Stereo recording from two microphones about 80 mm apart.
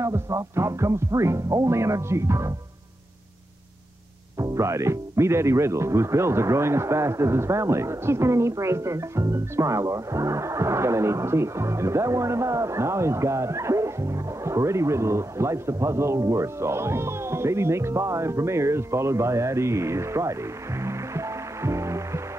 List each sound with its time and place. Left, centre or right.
0.0 s speech: right
4.4 s speech: right